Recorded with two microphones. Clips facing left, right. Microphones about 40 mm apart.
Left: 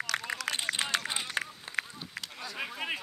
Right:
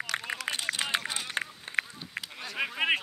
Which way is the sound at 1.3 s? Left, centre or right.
Right.